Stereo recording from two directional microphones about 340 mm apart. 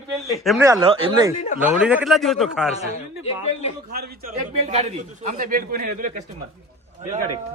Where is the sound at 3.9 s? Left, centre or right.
Right.